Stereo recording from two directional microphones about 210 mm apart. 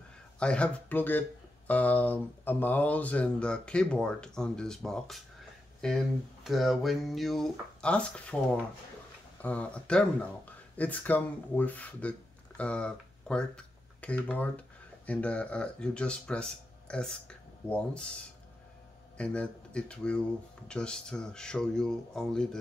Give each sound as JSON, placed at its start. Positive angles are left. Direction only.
{"t": 0.4, "sound": "speech", "side_deg": 5}
{"t": 9.4, "sound": "speech", "side_deg": 5}
{"t": 19.1, "sound": "speech", "side_deg": 5}